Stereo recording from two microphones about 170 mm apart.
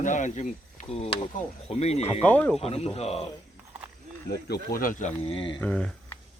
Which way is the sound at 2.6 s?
35° left (ahead or behind).